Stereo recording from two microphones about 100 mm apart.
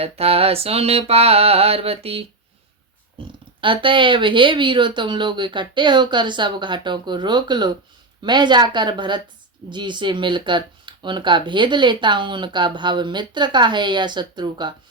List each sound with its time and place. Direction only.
0.0 s mantra: 80° right
3.2 s speech: 60° right (ahead or behind)